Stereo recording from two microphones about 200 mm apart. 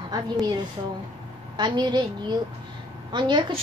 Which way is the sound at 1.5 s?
20° right (ahead or behind).